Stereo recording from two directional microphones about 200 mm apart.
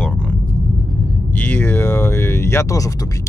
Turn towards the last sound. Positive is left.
turn(degrees=15)  # may be behind; listen again after turning